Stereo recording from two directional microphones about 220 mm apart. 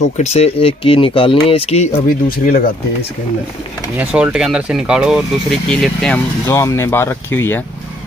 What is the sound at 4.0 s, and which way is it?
Speech, 5° right (ahead or behind).